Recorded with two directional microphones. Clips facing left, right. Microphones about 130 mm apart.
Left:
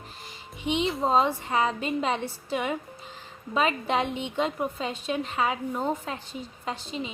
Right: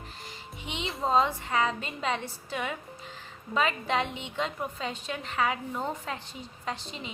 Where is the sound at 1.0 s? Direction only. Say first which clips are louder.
Right 1 dB; 25° left (ahead or behind).